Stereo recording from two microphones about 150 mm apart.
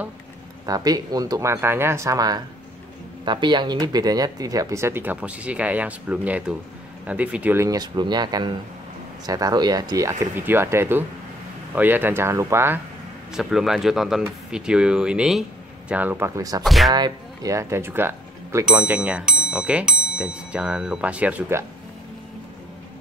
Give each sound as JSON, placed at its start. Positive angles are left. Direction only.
{"t": 0.7, "sound": "speech", "side_deg": -25}
{"t": 7.6, "sound": "speech", "side_deg": -25}
{"t": 13.3, "sound": "speech", "side_deg": 0}
{"t": 16.6, "sound": "speech", "side_deg": 0}
{"t": 16.9, "sound": "speech", "side_deg": -25}